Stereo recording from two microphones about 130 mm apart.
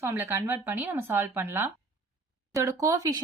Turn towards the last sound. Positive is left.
turn(degrees=-25)  # may be behind; listen again after turning